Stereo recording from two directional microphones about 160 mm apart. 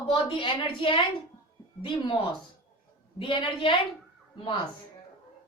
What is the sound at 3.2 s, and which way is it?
Speech, 30° left (ahead or behind).